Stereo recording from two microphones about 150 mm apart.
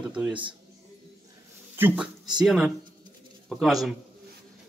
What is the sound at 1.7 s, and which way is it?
Speech, 15° right (ahead or behind).